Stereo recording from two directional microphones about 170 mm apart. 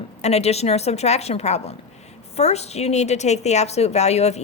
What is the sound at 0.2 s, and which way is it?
A woman's voice, 40° left (ahead or behind).